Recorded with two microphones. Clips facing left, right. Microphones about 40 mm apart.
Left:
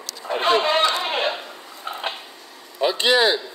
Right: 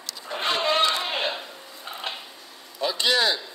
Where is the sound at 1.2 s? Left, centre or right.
Left.